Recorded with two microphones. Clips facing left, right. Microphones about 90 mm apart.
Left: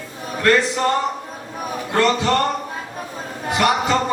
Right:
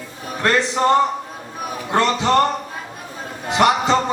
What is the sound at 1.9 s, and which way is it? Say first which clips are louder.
Speech: even; 20° right (ahead or behind).